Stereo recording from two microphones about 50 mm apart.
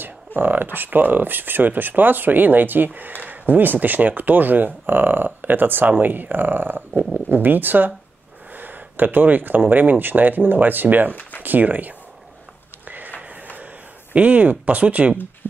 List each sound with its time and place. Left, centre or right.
0.0 s speech: right
12.8 s a sound: right
14.1 s speech: right